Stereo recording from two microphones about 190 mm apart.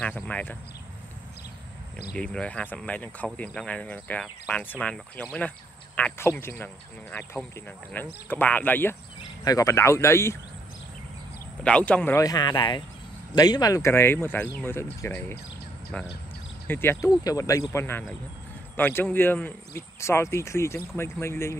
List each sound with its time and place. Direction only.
0.0 s speech: 5° left (ahead or behind)
2.1 s speech: 5° left (ahead or behind)
11.6 s speech: 5° left (ahead or behind)